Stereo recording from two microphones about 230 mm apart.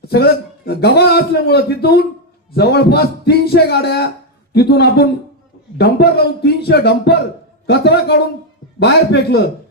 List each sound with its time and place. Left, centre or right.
0.1 s a man's voice: left